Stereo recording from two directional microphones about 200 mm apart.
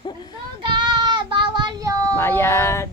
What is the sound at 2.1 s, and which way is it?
Speech, 10° left (ahead or behind).